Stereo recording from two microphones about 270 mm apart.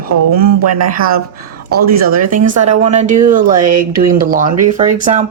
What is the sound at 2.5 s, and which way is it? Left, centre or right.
Speech, right.